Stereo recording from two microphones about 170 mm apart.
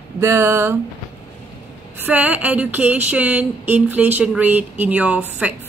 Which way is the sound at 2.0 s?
10° right (ahead or behind).